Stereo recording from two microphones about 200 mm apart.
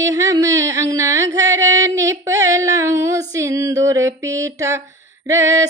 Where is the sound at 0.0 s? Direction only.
15° right (ahead or behind).